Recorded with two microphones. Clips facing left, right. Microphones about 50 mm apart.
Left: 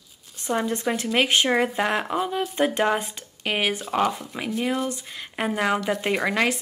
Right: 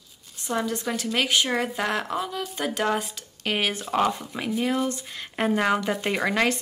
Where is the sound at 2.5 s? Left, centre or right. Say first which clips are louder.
Left 6 dB; left.